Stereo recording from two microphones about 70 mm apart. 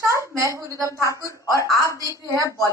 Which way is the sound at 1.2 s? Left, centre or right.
Left.